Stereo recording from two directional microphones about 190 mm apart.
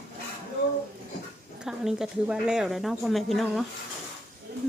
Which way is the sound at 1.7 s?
5° right (ahead or behind).